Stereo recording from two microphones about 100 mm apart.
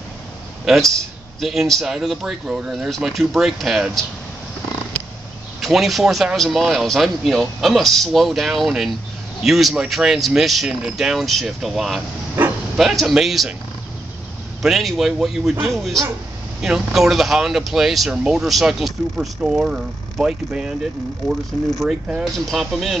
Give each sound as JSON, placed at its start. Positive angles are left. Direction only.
{"t": 0.7, "sound": "speech", "side_deg": -5}
{"t": 5.6, "sound": "speech", "side_deg": 0}
{"t": 12.4, "sound": "bow-wow", "side_deg": -20}
{"t": 12.7, "sound": "speech", "side_deg": 0}
{"t": 14.6, "sound": "speech", "side_deg": 0}